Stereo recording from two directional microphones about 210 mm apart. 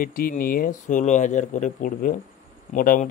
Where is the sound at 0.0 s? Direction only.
45° left (ahead or behind).